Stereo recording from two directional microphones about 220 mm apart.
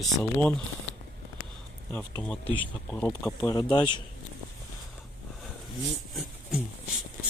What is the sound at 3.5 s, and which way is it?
Speech, 20° left (ahead or behind).